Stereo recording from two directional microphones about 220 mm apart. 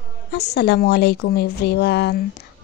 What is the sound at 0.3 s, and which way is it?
Speech, 50° left (ahead or behind).